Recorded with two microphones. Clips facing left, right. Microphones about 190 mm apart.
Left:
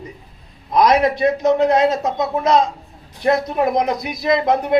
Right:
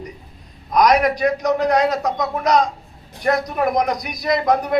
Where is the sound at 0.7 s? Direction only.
25° left (ahead or behind).